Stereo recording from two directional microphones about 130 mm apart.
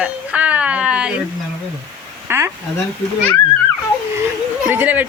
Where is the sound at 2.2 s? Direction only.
20° right (ahead or behind).